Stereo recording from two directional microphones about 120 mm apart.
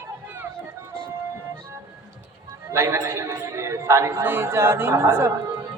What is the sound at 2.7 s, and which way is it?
A man's voice, 25° right (ahead or behind).